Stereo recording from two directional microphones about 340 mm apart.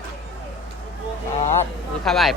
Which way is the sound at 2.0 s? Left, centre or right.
Centre.